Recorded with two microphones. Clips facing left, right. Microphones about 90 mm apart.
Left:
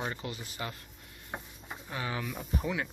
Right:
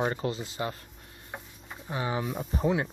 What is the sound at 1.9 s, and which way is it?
Speech, 25° right (ahead or behind).